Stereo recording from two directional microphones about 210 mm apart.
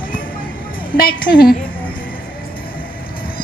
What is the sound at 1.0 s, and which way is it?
Speech, 45° left (ahead or behind).